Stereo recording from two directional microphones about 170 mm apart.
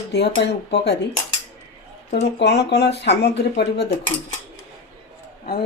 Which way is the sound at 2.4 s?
80° left.